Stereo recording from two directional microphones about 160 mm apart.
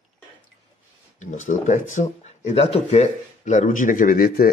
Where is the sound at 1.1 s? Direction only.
50° left (ahead or behind).